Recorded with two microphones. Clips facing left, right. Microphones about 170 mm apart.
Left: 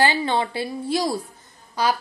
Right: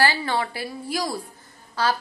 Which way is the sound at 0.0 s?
20° left (ahead or behind).